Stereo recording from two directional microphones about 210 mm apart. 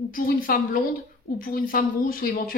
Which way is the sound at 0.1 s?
40° left (ahead or behind).